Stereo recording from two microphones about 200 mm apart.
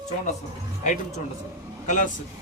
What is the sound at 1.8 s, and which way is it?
Speech, 40° left (ahead or behind).